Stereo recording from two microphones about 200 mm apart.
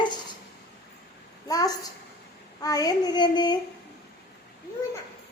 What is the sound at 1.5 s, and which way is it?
Speech, 20° left (ahead or behind).